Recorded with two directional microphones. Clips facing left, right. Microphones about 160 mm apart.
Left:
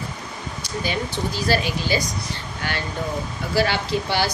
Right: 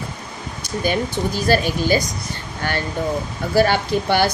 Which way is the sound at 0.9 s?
50° right (ahead or behind).